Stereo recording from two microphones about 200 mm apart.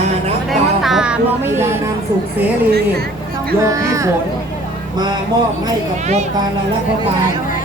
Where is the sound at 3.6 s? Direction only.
15° right (ahead or behind).